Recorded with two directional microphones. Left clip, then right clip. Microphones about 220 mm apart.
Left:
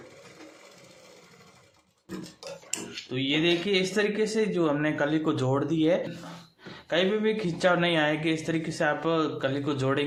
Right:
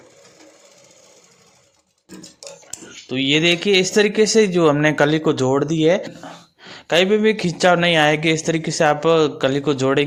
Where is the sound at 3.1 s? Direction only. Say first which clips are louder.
Right 9 dB; 40° right (ahead or behind).